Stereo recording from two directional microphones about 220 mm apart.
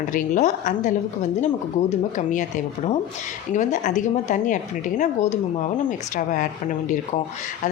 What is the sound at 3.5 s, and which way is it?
Speech, 35° left (ahead or behind).